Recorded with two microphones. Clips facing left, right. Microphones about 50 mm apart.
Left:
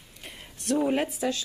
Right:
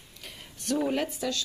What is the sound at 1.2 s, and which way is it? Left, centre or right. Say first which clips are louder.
Speech: left 3 dB; left.